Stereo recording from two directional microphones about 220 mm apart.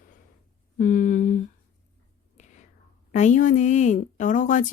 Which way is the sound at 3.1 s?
35° left (ahead or behind).